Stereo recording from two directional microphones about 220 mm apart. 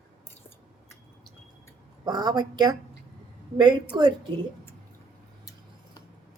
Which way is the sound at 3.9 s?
20° right (ahead or behind).